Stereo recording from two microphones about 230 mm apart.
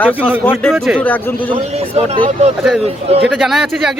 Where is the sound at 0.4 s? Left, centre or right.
Centre.